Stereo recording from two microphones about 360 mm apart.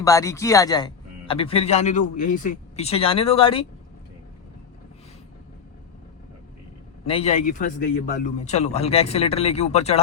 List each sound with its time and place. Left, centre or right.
0.0 s a man's voice: centre
7.1 s a man's voice: centre